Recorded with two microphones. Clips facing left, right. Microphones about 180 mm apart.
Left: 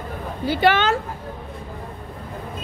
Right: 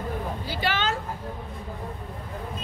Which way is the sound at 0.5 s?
65° left (ahead or behind).